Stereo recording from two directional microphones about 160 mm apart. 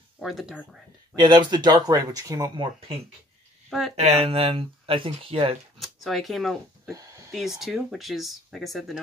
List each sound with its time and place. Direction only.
0.2 s speech: centre (ahead or behind)
1.1 s speech: 25° right (ahead or behind)
3.9 s speech: 40° right (ahead or behind)
5.8 s speech: centre (ahead or behind)
6.9 s a sound: 20° right (ahead or behind)
7.3 s speech: centre (ahead or behind)